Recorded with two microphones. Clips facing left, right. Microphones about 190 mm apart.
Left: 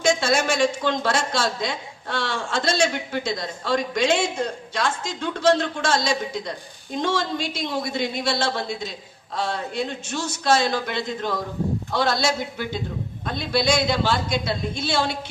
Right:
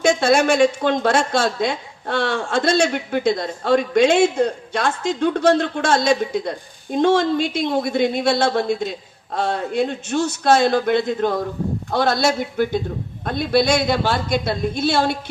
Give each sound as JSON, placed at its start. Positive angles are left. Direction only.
{"t": 0.0, "sound": "a woman's voice", "side_deg": -60}